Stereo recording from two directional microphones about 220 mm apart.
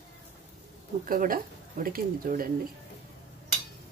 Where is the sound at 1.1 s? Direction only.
40° right (ahead or behind).